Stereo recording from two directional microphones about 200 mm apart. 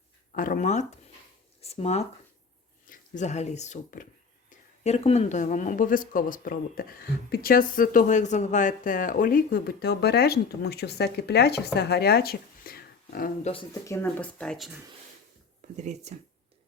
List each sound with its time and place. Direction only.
0.3 s speech: 45° left (ahead or behind)
13.8 s speech: 10° left (ahead or behind)
15.7 s speech: 35° right (ahead or behind)